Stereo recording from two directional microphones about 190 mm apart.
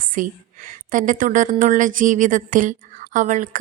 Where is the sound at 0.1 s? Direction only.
45° right (ahead or behind).